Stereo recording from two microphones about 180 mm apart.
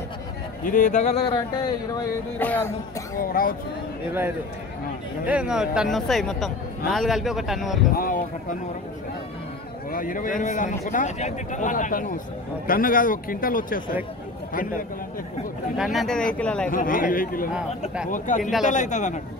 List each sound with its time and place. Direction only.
0.7 s a man's voice: 45° left (ahead or behind)
2.3 s music: 10° left (ahead or behind)
3.2 s a man's voice: 50° left (ahead or behind)
5.2 s speech: 5° right (ahead or behind)
7.9 s a man's voice: 50° left (ahead or behind)
9.8 s a man's voice: 50° left (ahead or behind)
15.8 s speech: centre (ahead or behind)
16.7 s a man's voice: 50° left (ahead or behind)
18.4 s speech: centre (ahead or behind)
18.7 s a man's voice: 45° left (ahead or behind)